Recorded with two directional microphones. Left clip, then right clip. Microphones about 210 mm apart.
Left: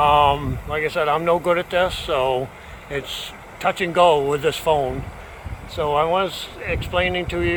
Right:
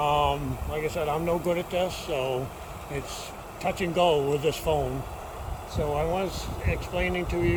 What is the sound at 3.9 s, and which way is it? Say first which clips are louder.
Speech: left 7 dB; 40° left (ahead or behind).